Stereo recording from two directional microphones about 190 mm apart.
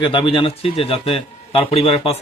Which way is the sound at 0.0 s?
25° left (ahead or behind).